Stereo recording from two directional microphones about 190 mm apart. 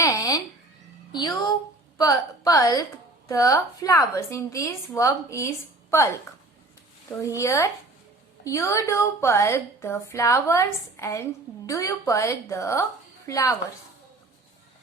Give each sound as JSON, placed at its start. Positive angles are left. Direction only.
{"t": 0.0, "sound": "a sound", "side_deg": 15}
{"t": 2.0, "sound": "a woman's voice", "side_deg": 20}
{"t": 7.2, "sound": "a woman's voice", "side_deg": 15}